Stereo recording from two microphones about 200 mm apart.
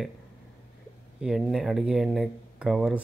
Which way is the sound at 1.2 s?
5° right (ahead or behind).